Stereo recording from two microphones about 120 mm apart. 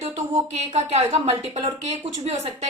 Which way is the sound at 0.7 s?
65° right (ahead or behind).